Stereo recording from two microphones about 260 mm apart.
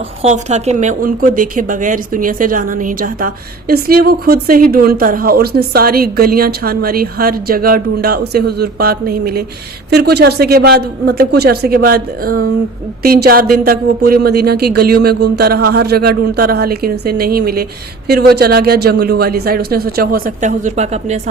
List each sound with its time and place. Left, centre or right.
0.2 s a woman's voice: right